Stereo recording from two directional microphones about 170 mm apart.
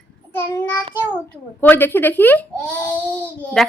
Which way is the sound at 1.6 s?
10° left (ahead or behind).